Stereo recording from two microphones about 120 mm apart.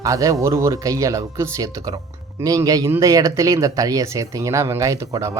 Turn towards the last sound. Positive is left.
turn(degrees=-25)  # may be behind; listen again after turning